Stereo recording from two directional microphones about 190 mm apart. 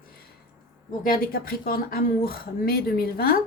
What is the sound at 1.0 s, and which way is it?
A woman's voice, 50° left (ahead or behind).